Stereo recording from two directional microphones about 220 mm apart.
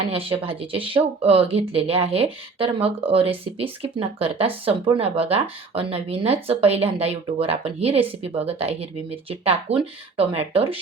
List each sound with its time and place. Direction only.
0.1 s speech: 25° right (ahead or behind)